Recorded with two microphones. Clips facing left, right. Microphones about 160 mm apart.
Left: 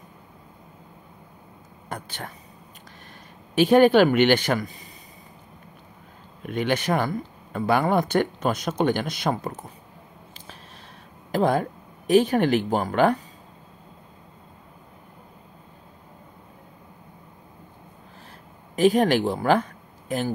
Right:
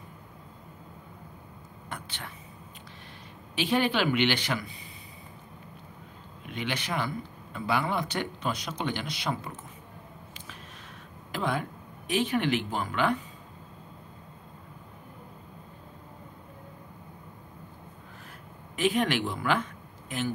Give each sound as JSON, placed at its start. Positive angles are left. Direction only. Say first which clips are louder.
{"t": 1.9, "sound": "whispering", "louder": "left 6 dB", "side_deg": 45}
{"t": 3.5, "sound": "speech", "louder": "left 11 dB", "side_deg": 50}
{"t": 6.4, "sound": "speech", "louder": "left 10 dB", "side_deg": 50}
{"t": 11.3, "sound": "speech", "louder": "left 9 dB", "side_deg": 40}
{"t": 18.8, "sound": "speech", "louder": "left 8 dB", "side_deg": 40}